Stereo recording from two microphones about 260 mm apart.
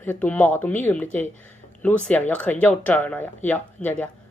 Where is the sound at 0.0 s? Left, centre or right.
Centre.